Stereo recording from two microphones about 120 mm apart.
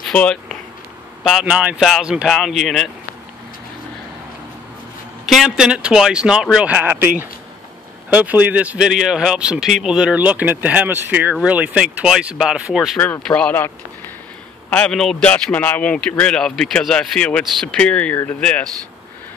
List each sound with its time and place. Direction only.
0.0 s speech: 10° left (ahead or behind)
1.2 s speech: 5° right (ahead or behind)
5.2 s speech: centre (ahead or behind)
6.7 s speech: 15° right (ahead or behind)
13.0 s a man's voice: 10° left (ahead or behind)
14.7 s a man's voice: 5° left (ahead or behind)